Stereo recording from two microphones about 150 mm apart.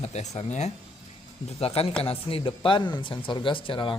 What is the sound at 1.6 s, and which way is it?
Speech, 40° left (ahead or behind).